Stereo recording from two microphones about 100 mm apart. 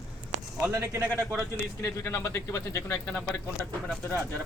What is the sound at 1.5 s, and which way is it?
Speech, 25° left (ahead or behind).